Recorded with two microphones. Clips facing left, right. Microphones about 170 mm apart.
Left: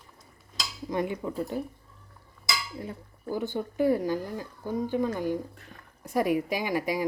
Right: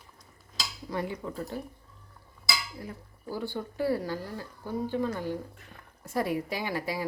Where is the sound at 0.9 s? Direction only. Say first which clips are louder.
Left 4 dB; 20° left (ahead or behind).